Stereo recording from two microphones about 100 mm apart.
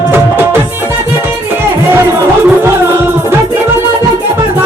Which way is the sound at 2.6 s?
20° right (ahead or behind).